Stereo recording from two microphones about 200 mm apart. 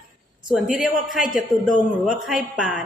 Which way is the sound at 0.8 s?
Centre (ahead or behind).